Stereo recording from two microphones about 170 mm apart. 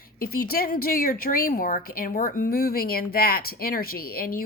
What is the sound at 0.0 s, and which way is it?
A woman's voice, 60° left (ahead or behind).